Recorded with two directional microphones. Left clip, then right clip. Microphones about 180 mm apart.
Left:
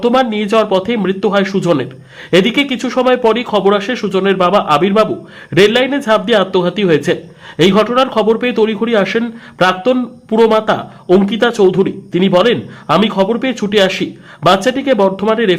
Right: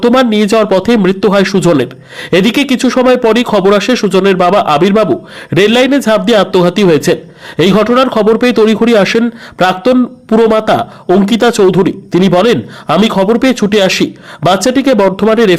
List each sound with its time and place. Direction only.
0.0 s a man's voice: 30° right (ahead or behind)